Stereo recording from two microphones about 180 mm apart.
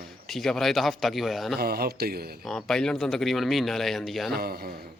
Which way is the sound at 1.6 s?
60° right (ahead or behind).